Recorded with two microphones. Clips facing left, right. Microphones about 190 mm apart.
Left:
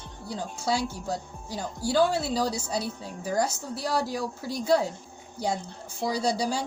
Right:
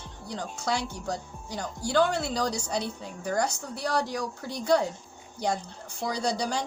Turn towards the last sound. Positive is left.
turn(degrees=5)  # may be behind; listen again after turning